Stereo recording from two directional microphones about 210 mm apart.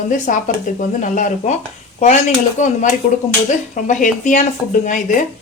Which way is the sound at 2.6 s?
35° left (ahead or behind).